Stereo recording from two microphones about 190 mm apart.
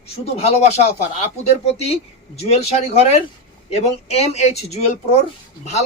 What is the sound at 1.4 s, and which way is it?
Speech, 35° left (ahead or behind).